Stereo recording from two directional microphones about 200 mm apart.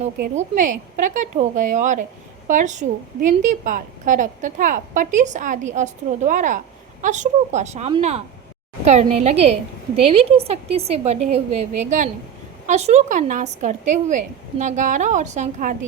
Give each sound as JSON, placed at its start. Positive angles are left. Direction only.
{"t": 0.3, "sound": "a woman's voice", "side_deg": -40}